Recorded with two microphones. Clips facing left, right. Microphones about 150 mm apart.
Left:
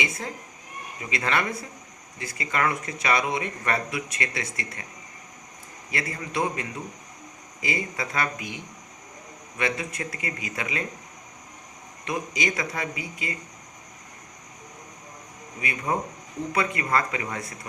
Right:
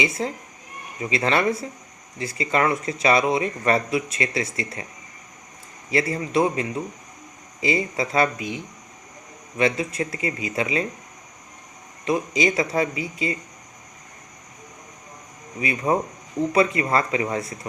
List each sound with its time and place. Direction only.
0.2 s speech: 25° right (ahead or behind)
5.9 s speech: 30° right (ahead or behind)
9.6 s speech: 25° right (ahead or behind)
12.0 s speech: 25° right (ahead or behind)
15.6 s speech: 25° right (ahead or behind)